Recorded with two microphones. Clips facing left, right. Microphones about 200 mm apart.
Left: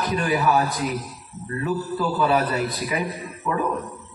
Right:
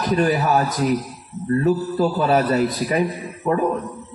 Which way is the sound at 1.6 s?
45° right (ahead or behind).